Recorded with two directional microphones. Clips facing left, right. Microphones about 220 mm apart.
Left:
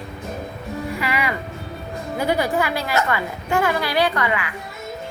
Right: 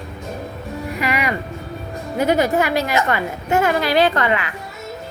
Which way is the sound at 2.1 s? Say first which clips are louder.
Right 4 dB; 20° right (ahead or behind).